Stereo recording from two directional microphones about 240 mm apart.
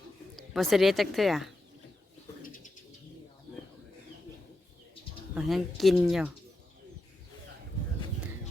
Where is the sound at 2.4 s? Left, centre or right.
Left.